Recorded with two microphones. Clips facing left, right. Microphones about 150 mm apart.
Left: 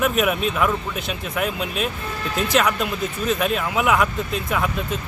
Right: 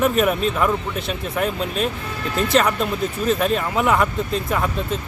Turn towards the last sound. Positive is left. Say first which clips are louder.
# right 1 dB
turn(degrees=5)  # may be behind; listen again after turning